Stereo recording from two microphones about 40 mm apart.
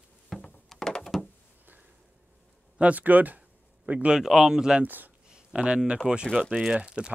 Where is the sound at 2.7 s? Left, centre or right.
Right.